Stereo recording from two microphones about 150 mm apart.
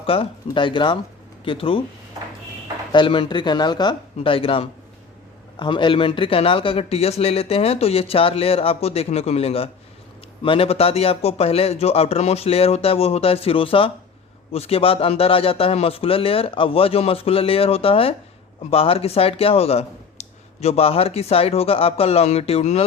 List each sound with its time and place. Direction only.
0.0 s a man's voice: 35° left (ahead or behind)
2.9 s a man's voice: 35° left (ahead or behind)